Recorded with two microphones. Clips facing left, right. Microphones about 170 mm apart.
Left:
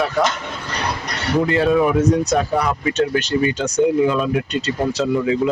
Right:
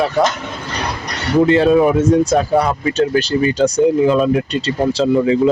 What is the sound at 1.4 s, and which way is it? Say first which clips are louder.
Speech: right 5 dB; 25° right (ahead or behind).